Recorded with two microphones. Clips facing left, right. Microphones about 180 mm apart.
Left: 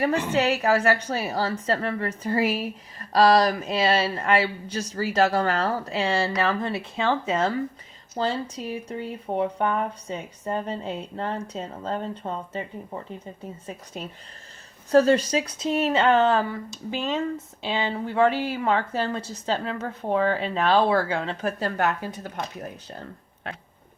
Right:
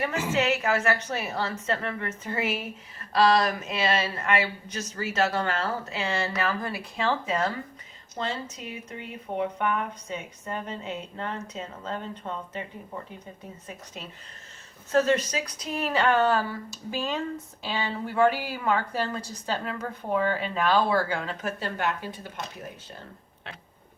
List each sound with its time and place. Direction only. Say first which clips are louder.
0.3 s a woman's voice: left 2 dB; 35° left (ahead or behind)
14.8 s speech: left 5 dB; 35° left (ahead or behind)
21.6 s speech: left 5 dB; 40° left (ahead or behind)